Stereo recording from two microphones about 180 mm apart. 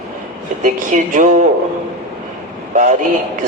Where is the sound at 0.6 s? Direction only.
45° right (ahead or behind).